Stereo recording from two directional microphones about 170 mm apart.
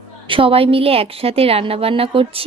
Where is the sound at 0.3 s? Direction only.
30° right (ahead or behind).